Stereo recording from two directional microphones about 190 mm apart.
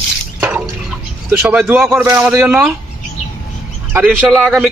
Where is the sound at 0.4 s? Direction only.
10° right (ahead or behind).